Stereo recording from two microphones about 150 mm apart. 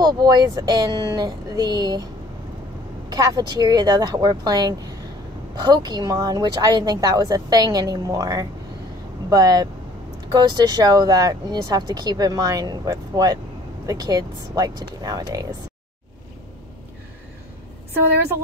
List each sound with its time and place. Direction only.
0.0 s speech: 25° right (ahead or behind)
3.1 s speech: 25° right (ahead or behind)